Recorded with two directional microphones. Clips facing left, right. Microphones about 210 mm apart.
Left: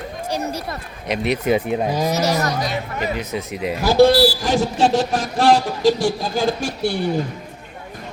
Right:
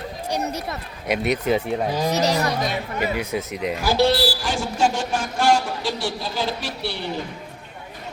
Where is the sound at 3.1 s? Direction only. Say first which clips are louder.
Even; 10° right (ahead or behind).